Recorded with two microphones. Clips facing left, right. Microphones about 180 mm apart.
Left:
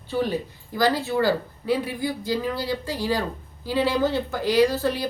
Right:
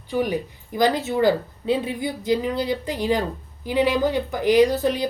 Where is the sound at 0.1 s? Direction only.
15° right (ahead or behind).